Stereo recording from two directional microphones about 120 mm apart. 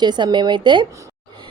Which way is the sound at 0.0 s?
35° right (ahead or behind).